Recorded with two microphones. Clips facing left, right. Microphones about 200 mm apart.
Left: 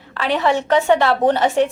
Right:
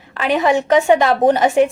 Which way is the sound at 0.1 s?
15° right (ahead or behind).